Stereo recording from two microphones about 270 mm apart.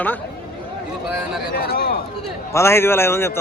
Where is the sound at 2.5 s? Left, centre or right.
Centre.